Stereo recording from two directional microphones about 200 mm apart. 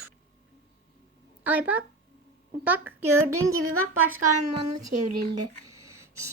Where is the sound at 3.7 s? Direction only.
90° right.